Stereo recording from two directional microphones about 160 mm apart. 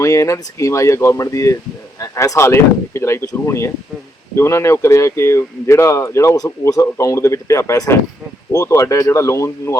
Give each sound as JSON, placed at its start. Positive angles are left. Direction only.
{"t": 0.0, "sound": "speech", "side_deg": 20}